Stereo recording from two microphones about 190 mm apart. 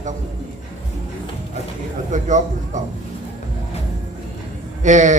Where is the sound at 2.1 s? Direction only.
40° right (ahead or behind).